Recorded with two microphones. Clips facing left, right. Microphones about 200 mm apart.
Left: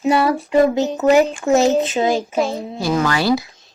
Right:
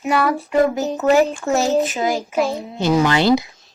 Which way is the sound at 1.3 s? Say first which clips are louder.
Left 4 dB; 20° left (ahead or behind).